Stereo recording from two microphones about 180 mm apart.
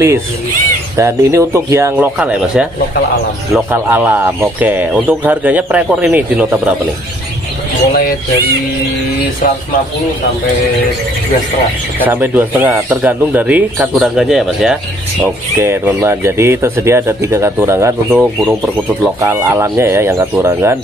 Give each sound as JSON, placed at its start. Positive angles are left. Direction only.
{"t": 0.9, "sound": "speech", "side_deg": -15}
{"t": 2.1, "sound": "speech", "side_deg": -5}
{"t": 3.7, "sound": "speech", "side_deg": -10}
{"t": 12.0, "sound": "speech", "side_deg": -10}
{"t": 15.2, "sound": "speech", "side_deg": -10}
{"t": 19.2, "sound": "speech", "side_deg": -15}